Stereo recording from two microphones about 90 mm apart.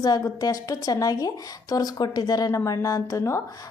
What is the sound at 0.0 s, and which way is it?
A woman's voice, 45° left (ahead or behind).